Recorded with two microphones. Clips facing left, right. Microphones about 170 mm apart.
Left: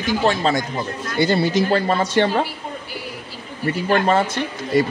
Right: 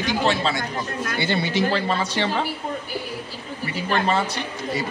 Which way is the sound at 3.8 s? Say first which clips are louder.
Left 4 dB; 50° left (ahead or behind).